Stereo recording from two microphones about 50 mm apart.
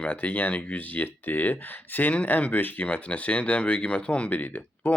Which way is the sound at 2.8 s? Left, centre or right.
Left.